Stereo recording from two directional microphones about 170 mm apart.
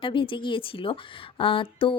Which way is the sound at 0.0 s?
30° left (ahead or behind).